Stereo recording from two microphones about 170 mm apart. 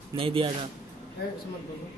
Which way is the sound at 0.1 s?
30° right (ahead or behind).